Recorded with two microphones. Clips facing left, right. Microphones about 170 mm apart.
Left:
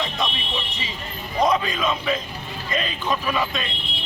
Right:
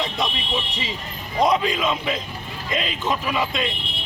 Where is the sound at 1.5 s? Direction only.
25° right (ahead or behind).